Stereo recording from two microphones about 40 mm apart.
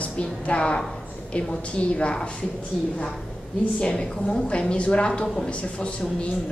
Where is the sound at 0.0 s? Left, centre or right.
Left.